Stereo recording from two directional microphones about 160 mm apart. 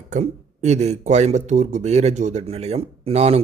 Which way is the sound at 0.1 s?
45° right (ahead or behind).